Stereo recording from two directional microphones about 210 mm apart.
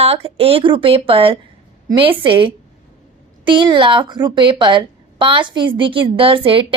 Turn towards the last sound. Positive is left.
turn(degrees=-25)  # may be behind; listen again after turning